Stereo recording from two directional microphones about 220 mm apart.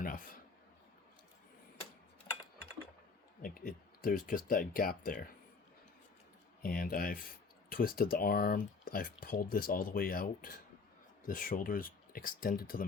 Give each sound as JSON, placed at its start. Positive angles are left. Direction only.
{"t": 0.0, "sound": "a man's voice", "side_deg": 40}
{"t": 3.4, "sound": "speech", "side_deg": 40}
{"t": 6.6, "sound": "speech", "side_deg": 40}